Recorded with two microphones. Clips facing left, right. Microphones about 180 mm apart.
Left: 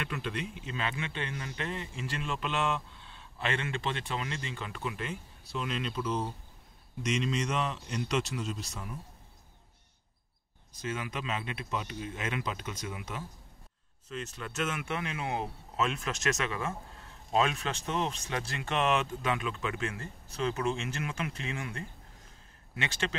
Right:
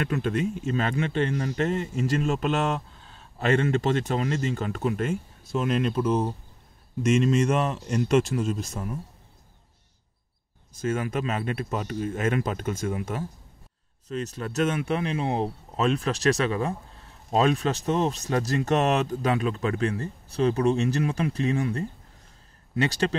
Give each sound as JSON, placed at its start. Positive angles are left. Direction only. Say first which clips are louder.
{"t": 0.0, "sound": "a man's voice", "louder": "right 10 dB", "side_deg": -45}
{"t": 10.7, "sound": "a man's voice", "louder": "right 9 dB", "side_deg": -50}